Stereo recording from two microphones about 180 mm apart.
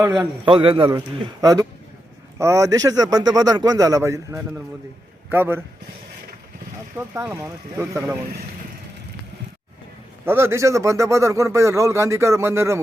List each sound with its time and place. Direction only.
0.4 s speech: 30° right (ahead or behind); by 5.6 s 10° right (ahead or behind)
6.9 s speech: 15° right (ahead or behind)
10.2 s speech: 15° right (ahead or behind)